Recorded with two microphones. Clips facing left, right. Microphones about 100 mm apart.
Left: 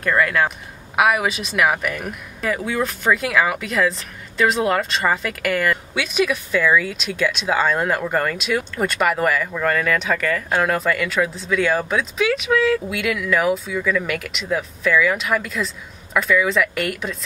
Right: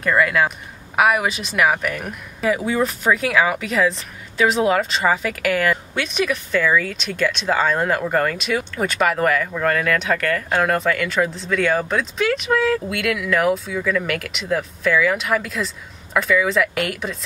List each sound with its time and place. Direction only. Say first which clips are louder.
0.0 s speech: right 1 dB; centre (ahead or behind)